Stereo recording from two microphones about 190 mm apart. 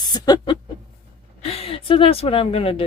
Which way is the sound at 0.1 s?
20° left (ahead or behind).